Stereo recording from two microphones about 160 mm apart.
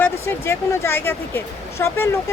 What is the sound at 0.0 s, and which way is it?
Speech, 15° left (ahead or behind).